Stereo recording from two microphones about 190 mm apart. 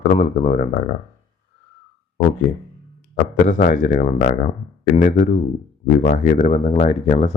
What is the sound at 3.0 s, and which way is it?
Speech, 45° left (ahead or behind).